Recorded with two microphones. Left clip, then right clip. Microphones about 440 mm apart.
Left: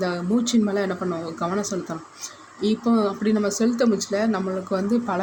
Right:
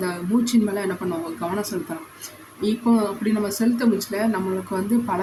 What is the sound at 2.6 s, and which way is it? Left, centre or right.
Speech, right.